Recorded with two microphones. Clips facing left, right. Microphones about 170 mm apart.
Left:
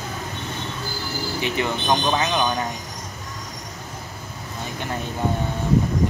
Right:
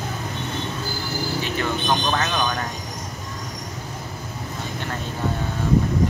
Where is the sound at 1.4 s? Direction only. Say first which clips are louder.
Left 4 dB; 15° left (ahead or behind).